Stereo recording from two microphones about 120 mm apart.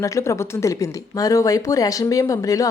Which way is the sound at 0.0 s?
25° left (ahead or behind).